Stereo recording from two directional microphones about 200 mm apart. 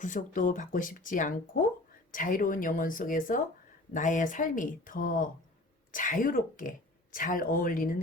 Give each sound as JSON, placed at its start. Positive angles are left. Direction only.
{"t": 0.0, "sound": "speech", "side_deg": 40}